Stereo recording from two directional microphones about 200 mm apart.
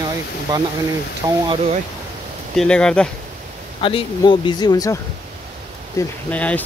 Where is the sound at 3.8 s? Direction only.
25° left (ahead or behind).